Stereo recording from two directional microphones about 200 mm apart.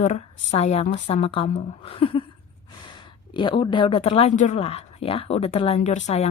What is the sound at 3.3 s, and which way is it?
Speech, 25° left (ahead or behind).